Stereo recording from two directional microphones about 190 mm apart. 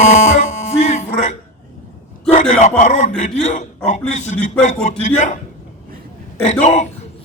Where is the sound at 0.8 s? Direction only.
40° left (ahead or behind).